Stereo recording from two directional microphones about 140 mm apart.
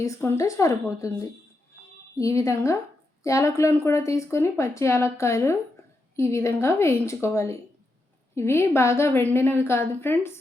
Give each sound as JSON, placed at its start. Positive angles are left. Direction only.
{"t": 0.0, "sound": "a woman's voice", "side_deg": 20}